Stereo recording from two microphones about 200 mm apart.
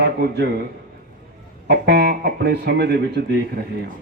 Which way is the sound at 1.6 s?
55° right (ahead or behind).